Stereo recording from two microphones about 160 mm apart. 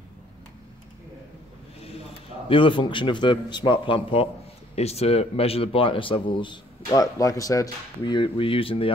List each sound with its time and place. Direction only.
1.9 s speech: 35° left (ahead or behind)